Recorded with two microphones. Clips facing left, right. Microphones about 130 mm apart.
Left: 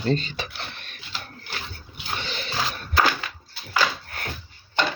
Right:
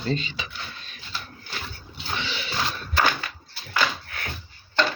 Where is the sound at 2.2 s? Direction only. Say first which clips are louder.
Right 1 dB; 45° left (ahead or behind).